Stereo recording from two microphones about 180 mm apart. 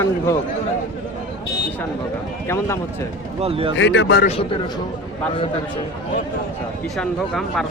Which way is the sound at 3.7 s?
90° left.